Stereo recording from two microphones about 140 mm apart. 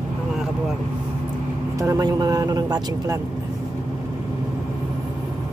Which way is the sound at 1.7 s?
20° right (ahead or behind).